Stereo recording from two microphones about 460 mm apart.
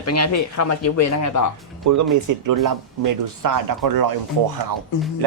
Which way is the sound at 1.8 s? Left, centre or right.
Right.